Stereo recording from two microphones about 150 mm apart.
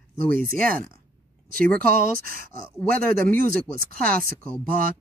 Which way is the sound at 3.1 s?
70° right (ahead or behind).